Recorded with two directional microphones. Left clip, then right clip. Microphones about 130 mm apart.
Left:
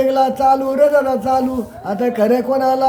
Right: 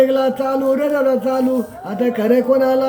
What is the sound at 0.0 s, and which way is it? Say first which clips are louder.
Speech: left 1 dB; 35° left (ahead or behind).